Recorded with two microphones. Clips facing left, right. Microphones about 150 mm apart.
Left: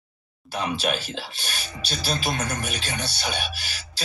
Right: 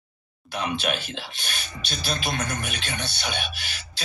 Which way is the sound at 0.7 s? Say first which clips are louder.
Left 1 dB; 35° left (ahead or behind).